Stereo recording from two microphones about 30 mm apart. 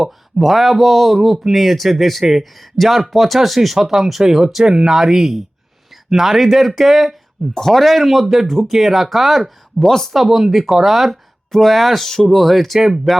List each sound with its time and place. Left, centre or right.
0.0 s speech: centre
3.8 s speech: centre
4.6 s speech: right
4.9 s speech: centre
7.6 s speech: centre
7.9 s speech: centre
9.4 s speech: centre
10.1 s speech: centre
11.5 s speech: centre
13.1 s speech: centre